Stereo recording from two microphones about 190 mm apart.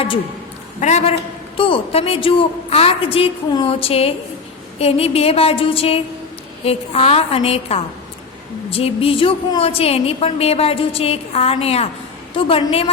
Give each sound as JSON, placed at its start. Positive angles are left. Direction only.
{"t": 0.8, "sound": "a woman's voice", "side_deg": 35}